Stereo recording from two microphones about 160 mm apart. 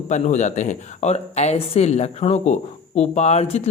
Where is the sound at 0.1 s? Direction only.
50° left (ahead or behind).